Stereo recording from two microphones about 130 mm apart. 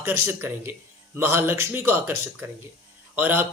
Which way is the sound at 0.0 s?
15° right (ahead or behind).